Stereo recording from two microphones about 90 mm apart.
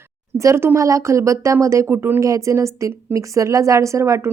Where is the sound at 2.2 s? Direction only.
35° right (ahead or behind).